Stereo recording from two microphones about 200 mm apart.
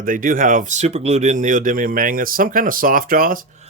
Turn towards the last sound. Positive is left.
turn(degrees=-45)  # may be behind; listen again after turning